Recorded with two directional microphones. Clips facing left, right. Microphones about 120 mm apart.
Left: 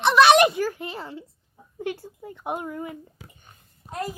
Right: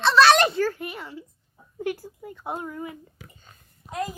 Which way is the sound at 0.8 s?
30° left (ahead or behind).